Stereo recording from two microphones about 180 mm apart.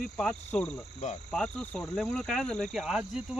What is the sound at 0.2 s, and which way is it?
Cricket, 5° left (ahead or behind).